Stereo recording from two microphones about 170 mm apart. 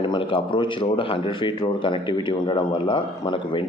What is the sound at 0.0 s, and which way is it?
A man's voice, 30° left (ahead or behind).